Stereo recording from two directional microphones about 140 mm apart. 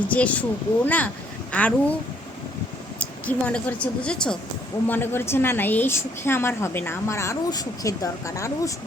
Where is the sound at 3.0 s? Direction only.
10° left (ahead or behind).